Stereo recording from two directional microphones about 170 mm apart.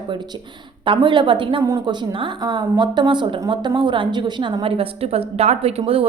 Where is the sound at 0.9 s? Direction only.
30° right (ahead or behind).